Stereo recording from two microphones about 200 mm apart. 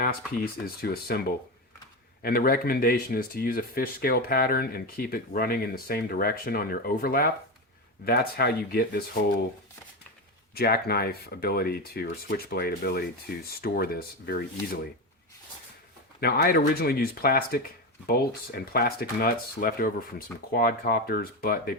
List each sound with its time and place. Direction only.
0.4 s speech: 50° left (ahead or behind)
2.2 s speech: 50° left (ahead or behind)
10.5 s speech: 50° left (ahead or behind)
16.2 s speech: 50° left (ahead or behind)